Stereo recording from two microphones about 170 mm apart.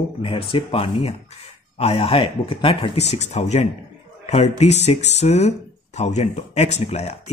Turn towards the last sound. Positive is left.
turn(degrees=40)  # may be behind; listen again after turning